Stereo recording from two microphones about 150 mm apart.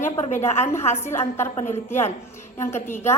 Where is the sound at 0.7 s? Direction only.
15° left (ahead or behind).